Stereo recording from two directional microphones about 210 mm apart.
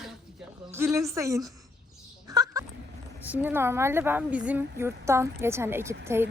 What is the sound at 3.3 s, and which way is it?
A woman's voice, 10° right (ahead or behind).